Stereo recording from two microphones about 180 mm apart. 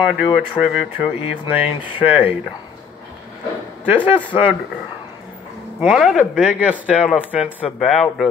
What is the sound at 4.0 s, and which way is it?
Speech, 10° left (ahead or behind).